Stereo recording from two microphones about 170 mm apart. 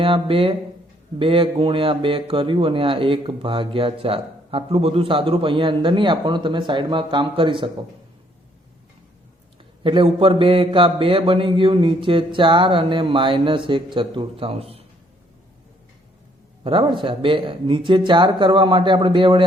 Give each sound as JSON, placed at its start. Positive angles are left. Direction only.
{"t": 0.0, "sound": "speech", "side_deg": -30}
{"t": 9.8, "sound": "speech", "side_deg": -30}
{"t": 16.6, "sound": "speech", "side_deg": -30}